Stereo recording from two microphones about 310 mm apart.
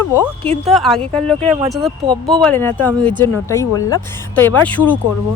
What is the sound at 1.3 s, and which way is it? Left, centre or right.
Speech, centre.